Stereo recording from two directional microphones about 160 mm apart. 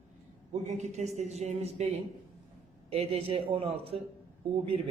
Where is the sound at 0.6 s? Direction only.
45° right (ahead or behind).